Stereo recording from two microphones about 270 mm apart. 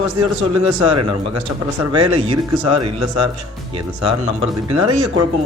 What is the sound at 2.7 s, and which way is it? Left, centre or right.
Speech, right.